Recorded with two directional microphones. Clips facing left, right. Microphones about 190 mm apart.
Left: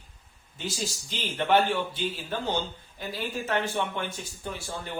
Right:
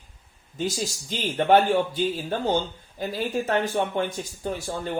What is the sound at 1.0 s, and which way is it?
Speech, 40° right (ahead or behind).